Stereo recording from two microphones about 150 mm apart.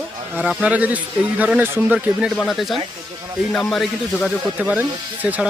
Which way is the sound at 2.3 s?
Centre (ahead or behind).